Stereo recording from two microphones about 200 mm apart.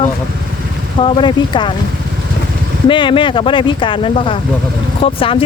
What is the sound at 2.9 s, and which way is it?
Speech, 25° left (ahead or behind).